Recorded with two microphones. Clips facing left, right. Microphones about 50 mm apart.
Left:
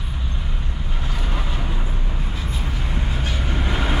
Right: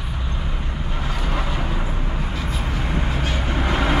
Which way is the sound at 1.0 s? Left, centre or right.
Right.